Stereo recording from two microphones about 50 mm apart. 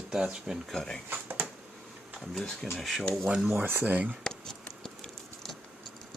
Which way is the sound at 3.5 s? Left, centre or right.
Right.